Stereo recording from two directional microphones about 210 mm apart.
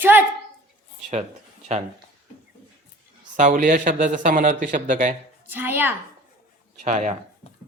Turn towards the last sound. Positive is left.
turn(degrees=-35)  # may be behind; listen again after turning